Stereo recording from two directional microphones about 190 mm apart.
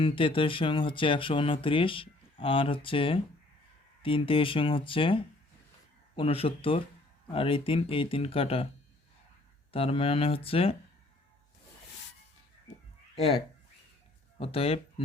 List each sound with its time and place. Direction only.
0.0 s speech: 25° left (ahead or behind)
9.7 s speech: 30° left (ahead or behind)
13.1 s speech: 30° left (ahead or behind)